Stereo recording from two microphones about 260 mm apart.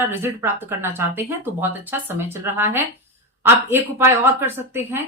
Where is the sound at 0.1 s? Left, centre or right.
Centre.